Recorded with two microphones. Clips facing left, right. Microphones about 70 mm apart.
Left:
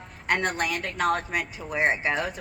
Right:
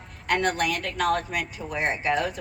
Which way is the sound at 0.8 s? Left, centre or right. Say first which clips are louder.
Right 1 dB; left.